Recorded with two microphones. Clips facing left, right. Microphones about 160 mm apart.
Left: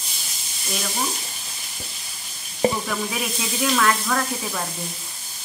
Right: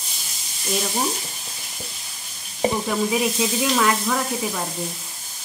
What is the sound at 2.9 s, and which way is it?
Speech, 20° right (ahead or behind).